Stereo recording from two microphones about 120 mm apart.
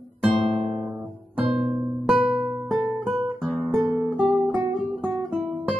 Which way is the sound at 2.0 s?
Centre (ahead or behind).